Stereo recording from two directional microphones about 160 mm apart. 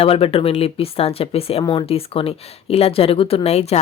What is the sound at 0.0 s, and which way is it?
Speech, 35° left (ahead or behind).